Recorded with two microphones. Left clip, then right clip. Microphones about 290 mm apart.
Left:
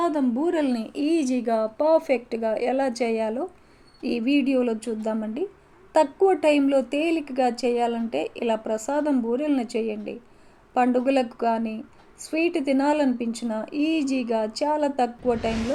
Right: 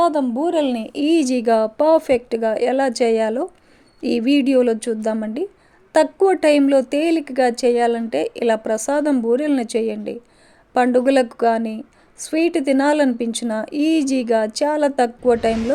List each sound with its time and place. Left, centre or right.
0.0 s a woman's voice: right
15.4 s a woman's voice: centre